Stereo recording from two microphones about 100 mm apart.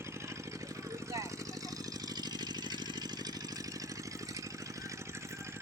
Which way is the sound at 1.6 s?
40° right (ahead or behind).